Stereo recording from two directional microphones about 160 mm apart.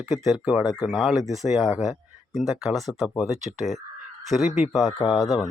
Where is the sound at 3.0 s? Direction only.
Centre (ahead or behind).